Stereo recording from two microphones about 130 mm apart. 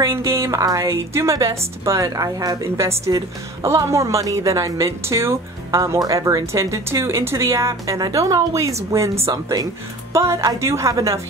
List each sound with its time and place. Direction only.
0.0 s a woman's voice: 20° right (ahead or behind)